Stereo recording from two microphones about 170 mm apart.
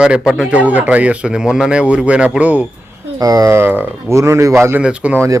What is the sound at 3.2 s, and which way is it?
Speech, 20° right (ahead or behind).